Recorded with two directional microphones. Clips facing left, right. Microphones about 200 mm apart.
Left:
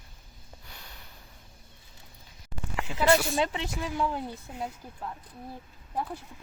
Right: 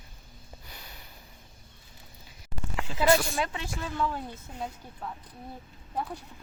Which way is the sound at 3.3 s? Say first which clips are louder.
Left 4 dB; 20° left (ahead or behind).